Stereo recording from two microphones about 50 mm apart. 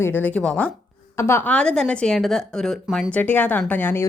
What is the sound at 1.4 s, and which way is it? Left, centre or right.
A woman's voice, left.